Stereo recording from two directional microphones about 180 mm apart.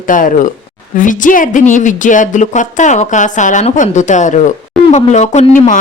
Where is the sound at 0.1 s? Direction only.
45° left (ahead or behind).